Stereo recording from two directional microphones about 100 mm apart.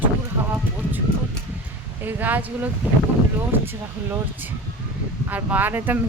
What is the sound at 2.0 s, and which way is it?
Speech, 20° right (ahead or behind).